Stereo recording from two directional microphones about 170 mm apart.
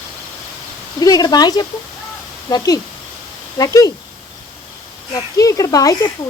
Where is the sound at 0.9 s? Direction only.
20° left (ahead or behind).